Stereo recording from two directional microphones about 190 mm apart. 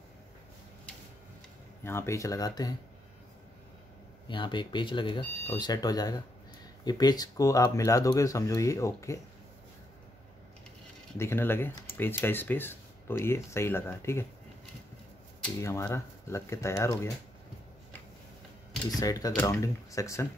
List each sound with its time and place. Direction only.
1.8 s speech: 15° left (ahead or behind)
4.3 s speech: 25° left (ahead or behind)
11.1 s speech: 15° left (ahead or behind)
15.6 s speech: 15° left (ahead or behind)
18.9 s speech: 20° left (ahead or behind)